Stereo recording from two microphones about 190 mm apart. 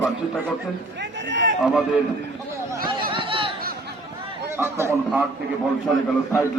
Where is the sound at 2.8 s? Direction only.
25° right (ahead or behind).